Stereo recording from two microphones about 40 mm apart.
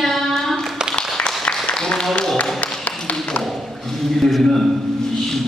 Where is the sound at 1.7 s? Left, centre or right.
Left.